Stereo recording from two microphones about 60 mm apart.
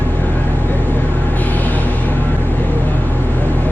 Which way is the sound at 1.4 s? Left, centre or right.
Left.